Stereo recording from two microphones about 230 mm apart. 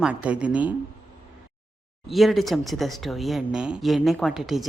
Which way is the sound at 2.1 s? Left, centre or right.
Centre.